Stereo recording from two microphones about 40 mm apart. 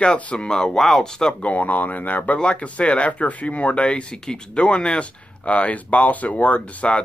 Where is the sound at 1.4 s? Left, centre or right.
Left.